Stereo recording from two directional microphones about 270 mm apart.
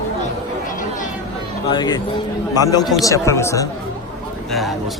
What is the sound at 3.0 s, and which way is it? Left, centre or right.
Speech, centre.